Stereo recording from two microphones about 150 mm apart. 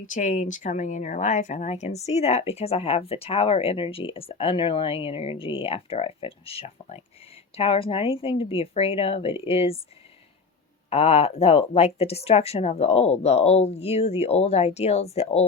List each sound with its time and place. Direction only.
0.0 s speech: 55° left (ahead or behind); by 9.7 s 40° left (ahead or behind)
10.8 s speech: 40° left (ahead or behind)